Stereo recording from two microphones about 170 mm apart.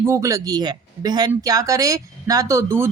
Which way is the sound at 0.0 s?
20° right (ahead or behind).